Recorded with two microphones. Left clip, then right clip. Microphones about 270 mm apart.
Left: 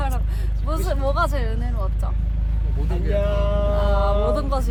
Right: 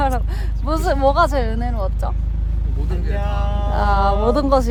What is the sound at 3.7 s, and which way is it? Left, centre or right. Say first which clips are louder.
Speech: right 9 dB; right.